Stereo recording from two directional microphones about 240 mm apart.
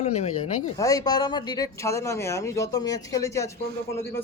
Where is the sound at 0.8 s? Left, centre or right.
Centre.